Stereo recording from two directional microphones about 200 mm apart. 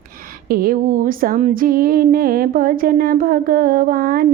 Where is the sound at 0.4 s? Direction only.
45° right (ahead or behind).